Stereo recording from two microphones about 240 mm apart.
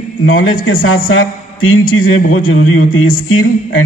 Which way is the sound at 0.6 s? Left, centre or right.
Left.